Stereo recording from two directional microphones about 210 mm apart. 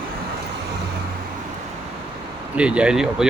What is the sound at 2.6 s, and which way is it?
Speech, 5° right (ahead or behind).